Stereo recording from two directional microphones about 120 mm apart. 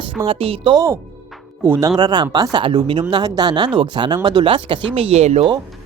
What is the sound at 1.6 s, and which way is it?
Speech, 20° right (ahead or behind).